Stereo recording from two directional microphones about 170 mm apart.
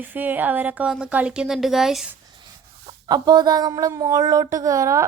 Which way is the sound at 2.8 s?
25° right (ahead or behind).